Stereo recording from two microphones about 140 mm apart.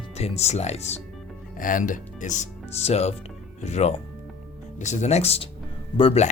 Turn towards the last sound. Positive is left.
turn(degrees=40)  # may be behind; listen again after turning